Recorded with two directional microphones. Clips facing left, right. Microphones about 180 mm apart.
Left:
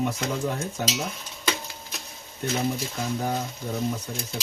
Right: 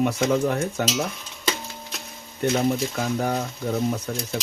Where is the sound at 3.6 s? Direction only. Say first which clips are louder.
Right 7 dB; 60° right (ahead or behind).